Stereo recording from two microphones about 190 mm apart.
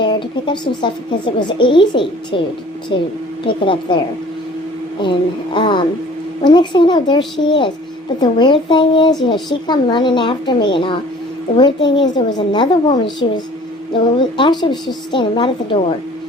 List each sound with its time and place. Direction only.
0.0 s a child's voice: 25° left (ahead or behind)
5.5 s a child's voice: 25° left (ahead or behind)
8.2 s a child's voice: 25° left (ahead or behind)